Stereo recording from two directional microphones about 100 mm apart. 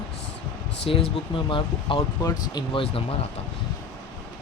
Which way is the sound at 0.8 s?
70° left (ahead or behind).